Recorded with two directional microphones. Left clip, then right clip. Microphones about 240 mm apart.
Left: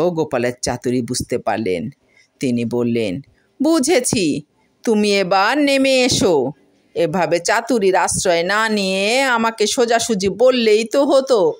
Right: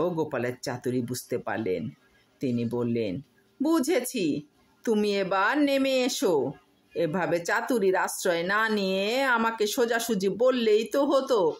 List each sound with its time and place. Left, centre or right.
0.0 s a woman's voice: left